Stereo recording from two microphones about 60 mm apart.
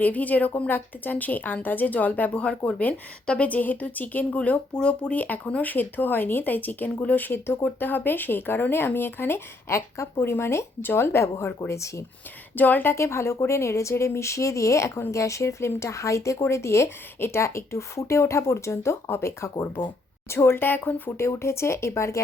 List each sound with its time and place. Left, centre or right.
0.0 s speech: left
12.5 s speech: left
12.9 s speech: left
21.1 s speech: left